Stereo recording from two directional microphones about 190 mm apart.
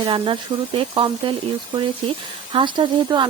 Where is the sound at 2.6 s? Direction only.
25° right (ahead or behind).